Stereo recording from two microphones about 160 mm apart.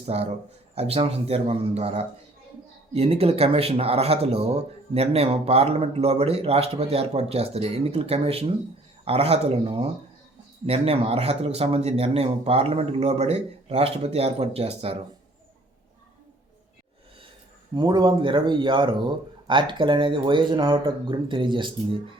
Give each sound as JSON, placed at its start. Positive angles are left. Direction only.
{"t": 0.0, "sound": "speech", "side_deg": -40}
{"t": 17.7, "sound": "speech", "side_deg": -30}